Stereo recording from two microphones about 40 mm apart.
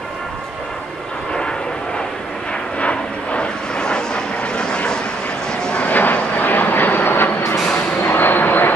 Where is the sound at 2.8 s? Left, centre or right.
Left.